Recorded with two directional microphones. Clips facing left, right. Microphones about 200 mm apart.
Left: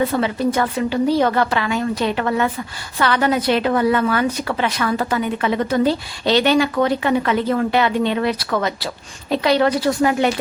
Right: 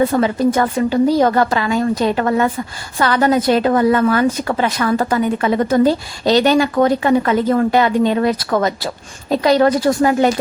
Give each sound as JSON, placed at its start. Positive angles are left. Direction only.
{"t": 0.0, "sound": "a woman's voice", "side_deg": -45}